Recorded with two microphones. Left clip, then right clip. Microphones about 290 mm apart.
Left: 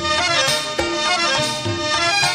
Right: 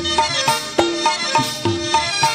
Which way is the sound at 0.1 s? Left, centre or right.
Right.